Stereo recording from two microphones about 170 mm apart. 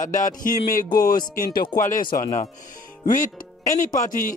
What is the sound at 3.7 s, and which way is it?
Speech, 50° left (ahead or behind).